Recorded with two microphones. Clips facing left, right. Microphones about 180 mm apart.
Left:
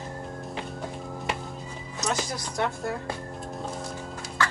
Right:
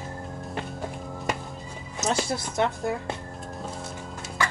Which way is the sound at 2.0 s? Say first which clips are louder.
Right 3 dB; 25° right (ahead or behind).